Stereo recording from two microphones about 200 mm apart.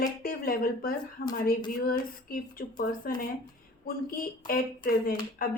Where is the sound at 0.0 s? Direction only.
45° left (ahead or behind).